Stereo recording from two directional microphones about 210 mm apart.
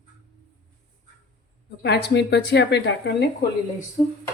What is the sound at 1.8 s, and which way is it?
Speech, 50° left (ahead or behind).